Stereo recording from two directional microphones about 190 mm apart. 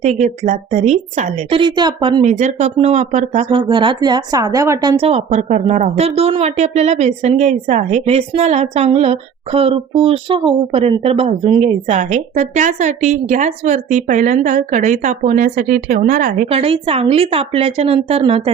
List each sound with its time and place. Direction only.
0.0 s speech: 40° right (ahead or behind)
2.2 s speech: 35° right (ahead or behind)
3.6 s a woman's voice: 25° right (ahead or behind); by 16.5 s 45° right (ahead or behind)
16.5 s speech: 30° right (ahead or behind)